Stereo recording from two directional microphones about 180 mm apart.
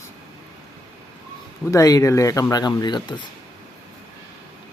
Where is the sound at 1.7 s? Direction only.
20° left (ahead or behind).